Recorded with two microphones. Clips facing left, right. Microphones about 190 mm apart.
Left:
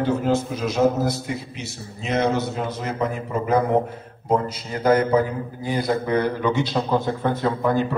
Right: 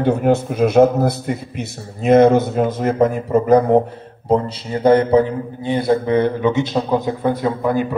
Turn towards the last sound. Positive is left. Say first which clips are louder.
# right 3 dB
turn(degrees=-10)  # may be behind; listen again after turning